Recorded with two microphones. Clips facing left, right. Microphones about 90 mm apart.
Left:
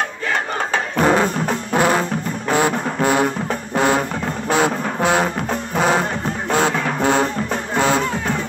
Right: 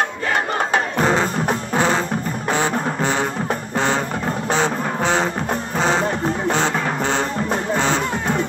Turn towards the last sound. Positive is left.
turn(degrees=10)  # may be behind; listen again after turning